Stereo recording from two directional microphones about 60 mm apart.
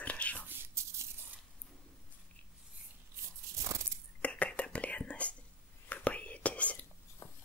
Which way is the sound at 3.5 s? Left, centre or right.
Right.